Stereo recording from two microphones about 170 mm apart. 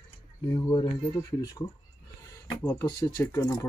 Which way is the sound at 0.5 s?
25° left (ahead or behind).